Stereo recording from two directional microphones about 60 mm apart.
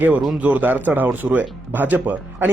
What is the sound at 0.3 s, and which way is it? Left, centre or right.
Speech, right.